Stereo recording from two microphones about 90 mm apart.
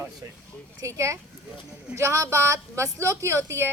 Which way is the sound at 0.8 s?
35° right (ahead or behind).